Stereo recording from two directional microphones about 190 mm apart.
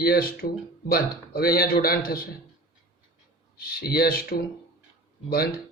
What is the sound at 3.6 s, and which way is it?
Speech, 55° left (ahead or behind).